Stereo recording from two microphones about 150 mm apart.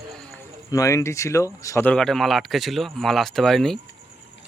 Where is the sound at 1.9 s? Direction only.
5° left (ahead or behind).